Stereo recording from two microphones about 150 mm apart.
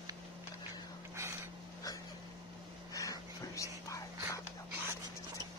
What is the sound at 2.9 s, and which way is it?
Whispering, 20° left (ahead or behind).